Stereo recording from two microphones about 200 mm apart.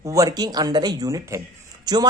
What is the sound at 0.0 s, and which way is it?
Speech, 15° right (ahead or behind).